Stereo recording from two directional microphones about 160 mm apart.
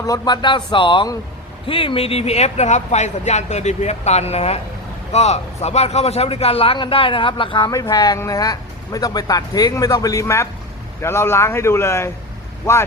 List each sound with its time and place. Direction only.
0.0 s a man's voice: 25° left (ahead or behind)